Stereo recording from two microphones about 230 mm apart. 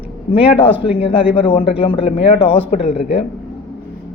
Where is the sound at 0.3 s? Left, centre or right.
Left.